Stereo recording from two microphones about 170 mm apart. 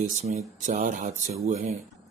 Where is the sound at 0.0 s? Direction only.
40° right (ahead or behind).